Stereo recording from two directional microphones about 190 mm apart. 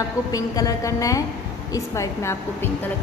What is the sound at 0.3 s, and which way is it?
A woman's voice, 20° left (ahead or behind).